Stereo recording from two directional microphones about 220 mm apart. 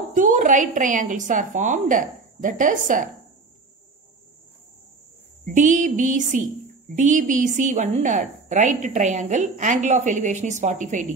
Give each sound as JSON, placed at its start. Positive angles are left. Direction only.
{"t": 0.1, "sound": "a woman's voice", "side_deg": -35}
{"t": 5.4, "sound": "a woman's voice", "side_deg": -35}